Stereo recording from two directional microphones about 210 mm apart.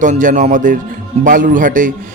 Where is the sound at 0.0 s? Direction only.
35° right (ahead or behind).